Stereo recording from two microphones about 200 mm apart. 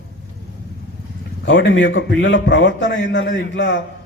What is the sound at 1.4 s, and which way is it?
A man's voice, 60° left (ahead or behind).